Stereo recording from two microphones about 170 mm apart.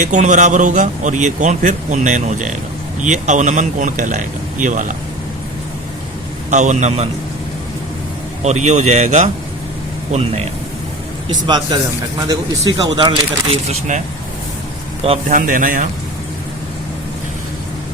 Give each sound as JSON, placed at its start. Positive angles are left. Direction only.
{"t": 0.0, "sound": "a man's voice", "side_deg": -45}
{"t": 6.5, "sound": "a man's voice", "side_deg": -45}
{"t": 8.4, "sound": "a man's voice", "side_deg": -45}
{"t": 11.4, "sound": "speech", "side_deg": -25}
{"t": 15.3, "sound": "a man's voice", "side_deg": -50}